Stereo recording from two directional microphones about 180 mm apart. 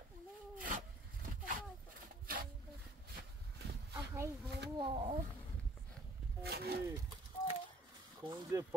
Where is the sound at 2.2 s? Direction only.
55° right (ahead or behind).